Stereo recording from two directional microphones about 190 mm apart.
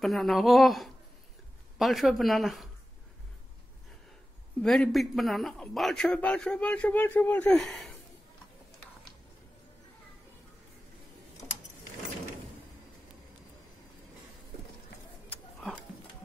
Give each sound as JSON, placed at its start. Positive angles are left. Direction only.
{"t": 0.0, "sound": "a man's voice", "side_deg": 0}
{"t": 4.6, "sound": "a man's voice", "side_deg": 0}
{"t": 15.2, "sound": "a sound", "side_deg": 5}